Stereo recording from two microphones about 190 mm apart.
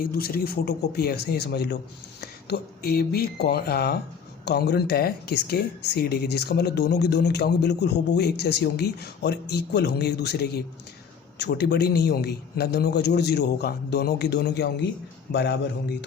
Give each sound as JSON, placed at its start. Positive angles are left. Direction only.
{"t": 0.0, "sound": "speech", "side_deg": 50}